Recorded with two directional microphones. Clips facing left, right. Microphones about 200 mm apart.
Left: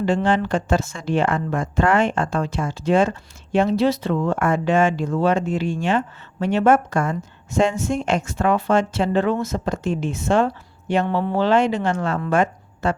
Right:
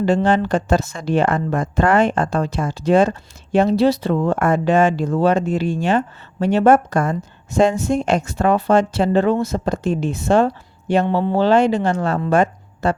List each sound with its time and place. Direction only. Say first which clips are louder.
0.0 s speech: right 3 dB; 40° right (ahead or behind)